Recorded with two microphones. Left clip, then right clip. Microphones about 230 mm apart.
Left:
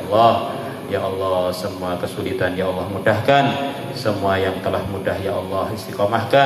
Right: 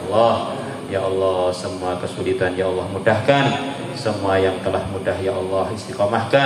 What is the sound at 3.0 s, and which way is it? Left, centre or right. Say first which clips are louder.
Speech: left 1 dB; left.